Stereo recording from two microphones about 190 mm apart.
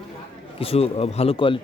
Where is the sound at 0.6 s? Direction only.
30° left (ahead or behind).